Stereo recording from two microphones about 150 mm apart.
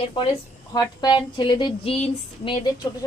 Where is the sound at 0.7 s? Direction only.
30° left (ahead or behind).